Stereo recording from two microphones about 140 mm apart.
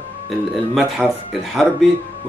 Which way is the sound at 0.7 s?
5° right (ahead or behind).